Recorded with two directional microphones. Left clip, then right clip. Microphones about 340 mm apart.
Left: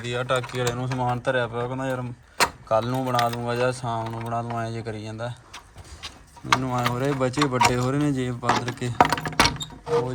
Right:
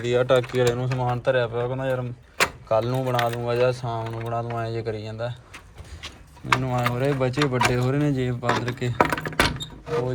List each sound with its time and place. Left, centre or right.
0.0 s speech: centre
6.5 s speech: centre
9.0 s a sound: left